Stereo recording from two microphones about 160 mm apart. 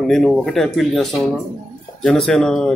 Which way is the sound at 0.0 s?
Centre (ahead or behind).